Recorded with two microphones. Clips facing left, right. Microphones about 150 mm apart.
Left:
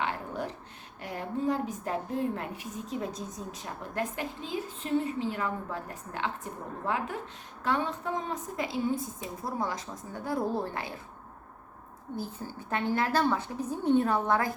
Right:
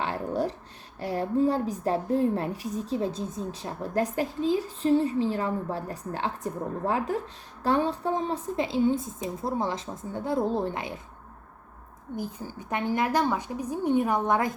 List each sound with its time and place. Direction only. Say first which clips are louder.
0.0 s a sound: right 5 dB; 35° right (ahead or behind)
0.9 s a woman's voice: right 8 dB; 35° right (ahead or behind); by 11.0 s 20° right (ahead or behind)
12.1 s a woman's voice: right 3 dB; 15° right (ahead or behind)